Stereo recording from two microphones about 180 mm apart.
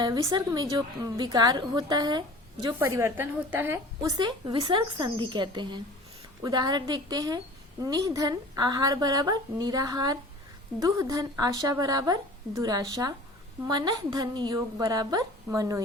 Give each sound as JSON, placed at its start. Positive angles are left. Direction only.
{"t": 0.0, "sound": "a woman's voice", "side_deg": -20}